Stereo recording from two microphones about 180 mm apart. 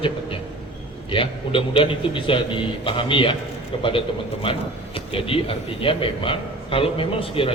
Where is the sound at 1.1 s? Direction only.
30° left (ahead or behind).